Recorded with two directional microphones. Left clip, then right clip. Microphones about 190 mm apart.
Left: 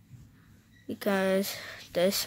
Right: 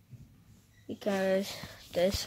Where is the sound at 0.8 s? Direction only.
20° left (ahead or behind).